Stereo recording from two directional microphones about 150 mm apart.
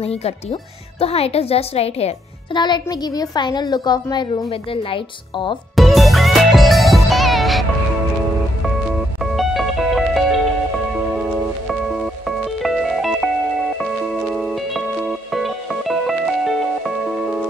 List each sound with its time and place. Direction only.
0.0 s speech: 45° left (ahead or behind)
2.6 s a woman's voice: 30° left (ahead or behind)
5.8 s music: centre (ahead or behind)
9.2 s music: centre (ahead or behind)
12.3 s music: centre (ahead or behind)